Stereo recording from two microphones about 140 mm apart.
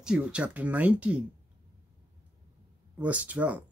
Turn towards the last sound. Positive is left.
turn(degrees=-10)  # may be behind; listen again after turning